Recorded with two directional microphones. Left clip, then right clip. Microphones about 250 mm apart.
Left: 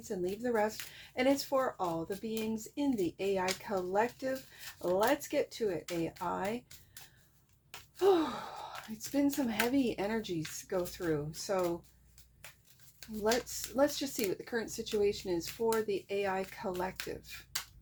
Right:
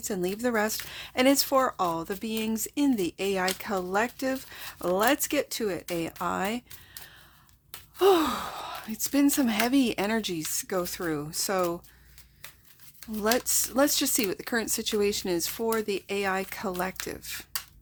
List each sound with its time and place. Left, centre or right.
0.0 s speech: right
7.9 s speech: right
13.5 s speech: right